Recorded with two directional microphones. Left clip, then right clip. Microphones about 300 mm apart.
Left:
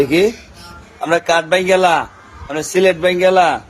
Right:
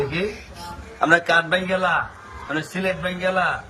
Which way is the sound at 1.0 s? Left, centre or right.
Left.